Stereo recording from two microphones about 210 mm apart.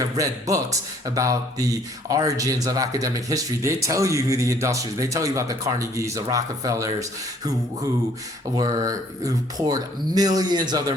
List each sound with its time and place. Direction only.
0.2 s speech: 15° right (ahead or behind)
8.5 s speech: 20° right (ahead or behind)